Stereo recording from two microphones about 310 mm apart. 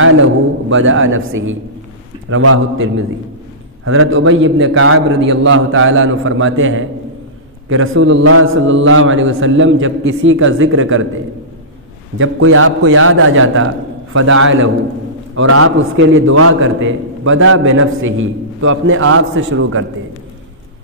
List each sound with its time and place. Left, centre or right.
0.0 s a man's voice: right
12.2 s a man's voice: right